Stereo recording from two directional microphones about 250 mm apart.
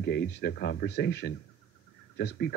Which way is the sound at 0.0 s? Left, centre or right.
Left.